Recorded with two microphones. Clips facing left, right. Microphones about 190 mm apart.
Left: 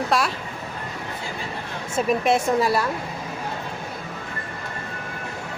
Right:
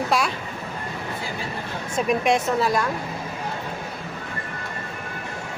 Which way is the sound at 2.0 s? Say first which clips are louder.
Left 1 dB; 5° left (ahead or behind).